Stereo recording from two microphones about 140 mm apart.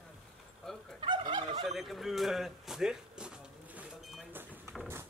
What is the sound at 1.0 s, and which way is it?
Turkey, 35° right (ahead or behind).